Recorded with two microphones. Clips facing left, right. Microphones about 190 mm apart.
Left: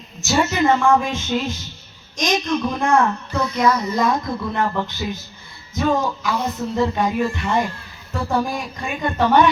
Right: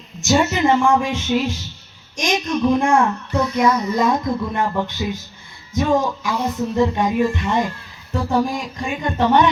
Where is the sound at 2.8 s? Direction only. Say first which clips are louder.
Right 1 dB; 10° right (ahead or behind).